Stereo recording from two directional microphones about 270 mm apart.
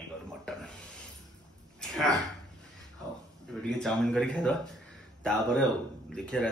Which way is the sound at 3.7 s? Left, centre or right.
Centre.